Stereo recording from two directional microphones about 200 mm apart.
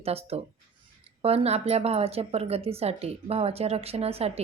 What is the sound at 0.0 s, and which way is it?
Speech, 30° right (ahead or behind).